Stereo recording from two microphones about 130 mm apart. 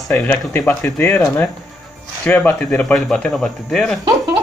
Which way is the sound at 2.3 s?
10° left (ahead or behind).